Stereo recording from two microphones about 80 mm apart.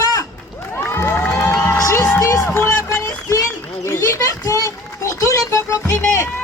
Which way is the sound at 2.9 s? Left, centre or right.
Left.